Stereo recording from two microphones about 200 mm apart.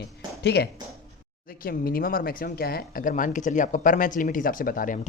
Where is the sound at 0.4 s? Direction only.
55° left (ahead or behind).